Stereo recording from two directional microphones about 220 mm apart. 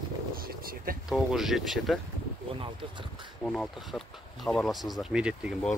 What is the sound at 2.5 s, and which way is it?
Speech, 20° right (ahead or behind).